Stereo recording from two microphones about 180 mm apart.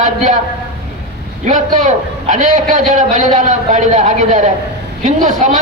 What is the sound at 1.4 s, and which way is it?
A man's voice, 45° right (ahead or behind).